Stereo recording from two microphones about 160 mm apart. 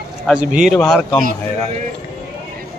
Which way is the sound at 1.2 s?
55° right (ahead or behind).